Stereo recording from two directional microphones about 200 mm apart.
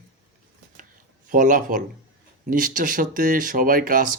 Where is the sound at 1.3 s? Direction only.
40° right (ahead or behind).